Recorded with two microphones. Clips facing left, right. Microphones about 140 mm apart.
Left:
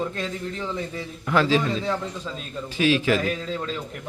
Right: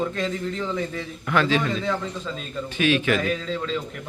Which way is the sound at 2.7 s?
30° left (ahead or behind).